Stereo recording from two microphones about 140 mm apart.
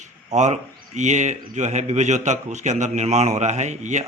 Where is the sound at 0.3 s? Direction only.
55° right (ahead or behind).